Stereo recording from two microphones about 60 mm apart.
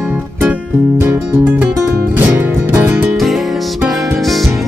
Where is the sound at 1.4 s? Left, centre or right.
Right.